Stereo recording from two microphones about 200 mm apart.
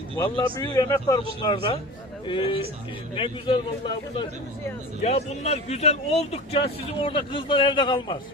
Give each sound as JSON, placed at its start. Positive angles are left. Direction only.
{"t": 0.3, "sound": "speech", "side_deg": 20}
{"t": 5.0, "sound": "speech", "side_deg": 35}